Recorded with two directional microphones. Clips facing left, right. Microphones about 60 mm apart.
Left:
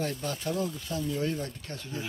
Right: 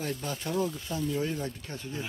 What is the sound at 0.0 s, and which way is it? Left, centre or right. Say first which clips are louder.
Speech: left 2 dB; centre.